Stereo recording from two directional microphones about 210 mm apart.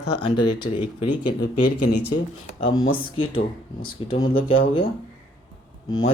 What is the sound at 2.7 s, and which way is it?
Speech, 20° left (ahead or behind).